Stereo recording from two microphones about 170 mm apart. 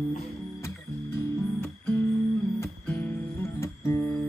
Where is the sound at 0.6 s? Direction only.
15° left (ahead or behind).